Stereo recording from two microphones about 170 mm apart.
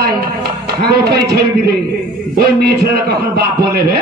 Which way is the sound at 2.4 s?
70° right (ahead or behind).